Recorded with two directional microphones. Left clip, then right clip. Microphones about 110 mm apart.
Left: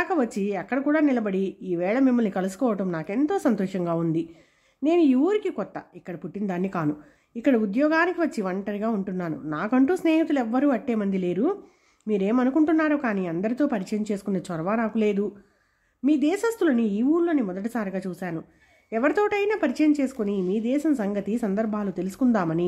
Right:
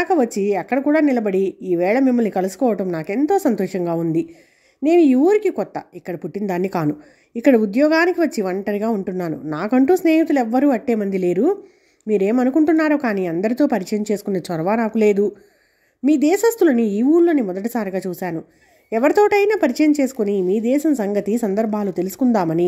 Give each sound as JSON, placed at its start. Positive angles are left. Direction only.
{"t": 0.0, "sound": "a woman's voice", "side_deg": -30}